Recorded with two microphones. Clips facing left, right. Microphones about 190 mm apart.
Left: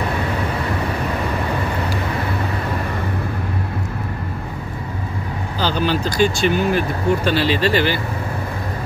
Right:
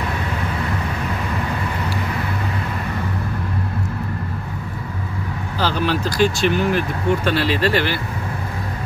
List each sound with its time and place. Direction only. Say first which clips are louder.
5.6 s speech: left 1 dB; centre (ahead or behind)